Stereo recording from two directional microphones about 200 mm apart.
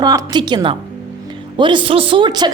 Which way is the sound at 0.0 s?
20° right (ahead or behind).